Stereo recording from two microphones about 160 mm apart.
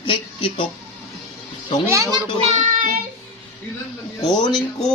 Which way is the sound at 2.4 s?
45° right (ahead or behind).